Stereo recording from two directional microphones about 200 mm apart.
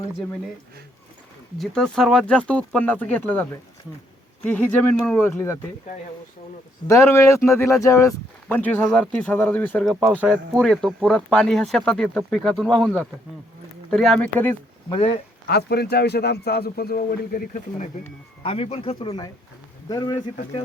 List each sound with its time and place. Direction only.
1.5 s speech: centre (ahead or behind)
6.8 s speech: 15° left (ahead or behind)
14.8 s speech: 25° left (ahead or behind)
15.4 s a man's voice: 55° left (ahead or behind)
18.4 s speech: 30° left (ahead or behind)